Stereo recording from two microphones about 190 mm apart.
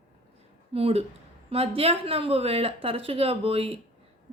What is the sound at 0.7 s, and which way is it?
Speech, 30° right (ahead or behind).